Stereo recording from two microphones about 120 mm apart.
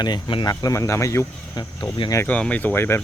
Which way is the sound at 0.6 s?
25° left (ahead or behind).